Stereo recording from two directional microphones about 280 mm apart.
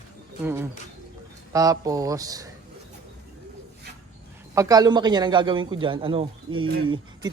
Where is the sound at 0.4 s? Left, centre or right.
Centre.